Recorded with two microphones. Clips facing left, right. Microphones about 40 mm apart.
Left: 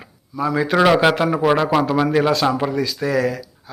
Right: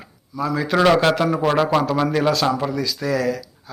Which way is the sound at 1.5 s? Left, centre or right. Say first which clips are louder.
Left 1 dB; centre.